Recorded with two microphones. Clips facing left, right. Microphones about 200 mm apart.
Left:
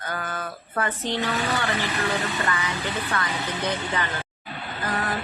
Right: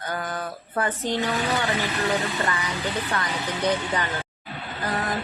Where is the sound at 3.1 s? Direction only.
15° right (ahead or behind).